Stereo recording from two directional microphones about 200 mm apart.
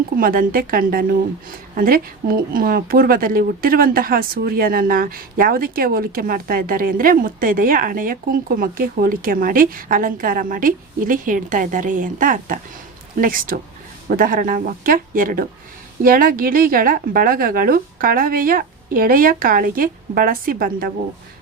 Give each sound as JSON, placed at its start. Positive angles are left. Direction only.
{"t": 0.2, "sound": "speech", "side_deg": -45}